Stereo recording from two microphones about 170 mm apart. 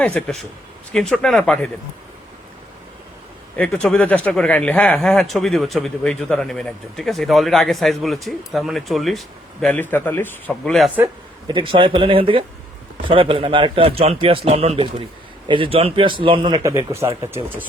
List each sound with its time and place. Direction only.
0.0 s speech: 5° left (ahead or behind)
3.5 s a man's voice: 10° left (ahead or behind)
11.4 s a man's voice: 30° right (ahead or behind); by 17.7 s 10° right (ahead or behind)